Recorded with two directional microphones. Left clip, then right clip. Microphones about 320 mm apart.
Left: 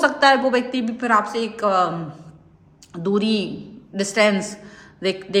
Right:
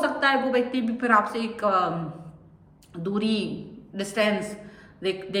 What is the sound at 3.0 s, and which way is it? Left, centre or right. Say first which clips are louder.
A woman's voice: left 6 dB; centre.